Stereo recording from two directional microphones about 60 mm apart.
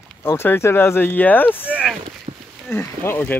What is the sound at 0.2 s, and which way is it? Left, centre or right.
Speech, left.